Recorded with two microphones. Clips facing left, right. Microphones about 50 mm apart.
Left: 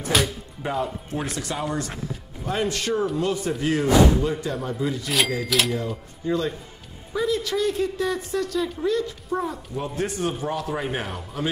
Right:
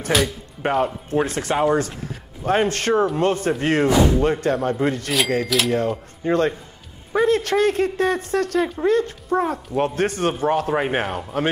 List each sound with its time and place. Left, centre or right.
0.1 s speech: centre
0.6 s speech: right
1.1 s speech: right
5.4 s speech: centre
5.7 s speech: right